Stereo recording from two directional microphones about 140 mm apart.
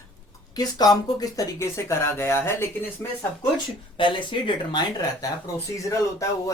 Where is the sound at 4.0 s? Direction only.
35° left (ahead or behind).